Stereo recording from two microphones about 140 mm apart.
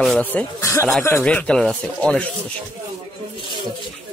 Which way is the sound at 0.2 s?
15° left (ahead or behind).